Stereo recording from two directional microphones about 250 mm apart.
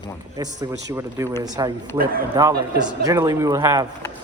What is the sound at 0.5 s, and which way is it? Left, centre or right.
Speech, centre.